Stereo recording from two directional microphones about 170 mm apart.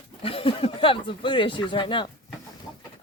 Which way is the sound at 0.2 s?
35° left (ahead or behind).